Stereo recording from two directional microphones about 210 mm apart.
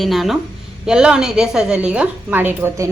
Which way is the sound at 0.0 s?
Centre (ahead or behind).